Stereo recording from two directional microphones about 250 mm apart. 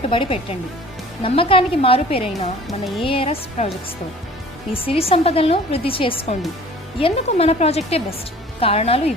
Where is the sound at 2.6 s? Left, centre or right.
Centre.